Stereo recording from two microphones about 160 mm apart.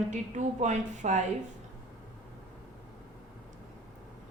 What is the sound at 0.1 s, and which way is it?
A woman's voice, 50° right (ahead or behind).